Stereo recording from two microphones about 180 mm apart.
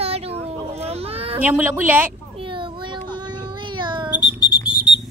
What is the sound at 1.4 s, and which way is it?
Speech, 10° right (ahead or behind).